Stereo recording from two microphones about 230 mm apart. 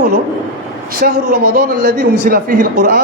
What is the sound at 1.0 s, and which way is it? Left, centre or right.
Speech, right.